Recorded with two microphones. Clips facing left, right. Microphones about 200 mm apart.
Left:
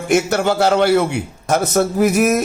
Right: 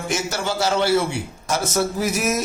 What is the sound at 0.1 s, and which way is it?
Speech, 60° left (ahead or behind).